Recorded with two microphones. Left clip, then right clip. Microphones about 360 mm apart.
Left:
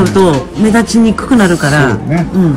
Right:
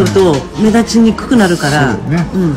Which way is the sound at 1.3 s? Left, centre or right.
Left.